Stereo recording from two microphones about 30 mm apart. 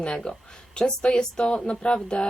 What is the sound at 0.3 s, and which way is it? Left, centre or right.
Speech, left.